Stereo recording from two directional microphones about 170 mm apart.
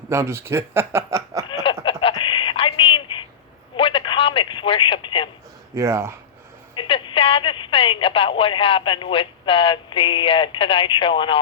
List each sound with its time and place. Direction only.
0.1 s speech: 15° right (ahead or behind)
1.6 s a sound: 30° left (ahead or behind)
3.8 s telephone: 30° left (ahead or behind)
5.7 s speech: 15° right (ahead or behind)
6.7 s speech: 30° left (ahead or behind)